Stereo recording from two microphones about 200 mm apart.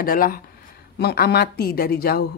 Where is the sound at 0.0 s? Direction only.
45° left (ahead or behind).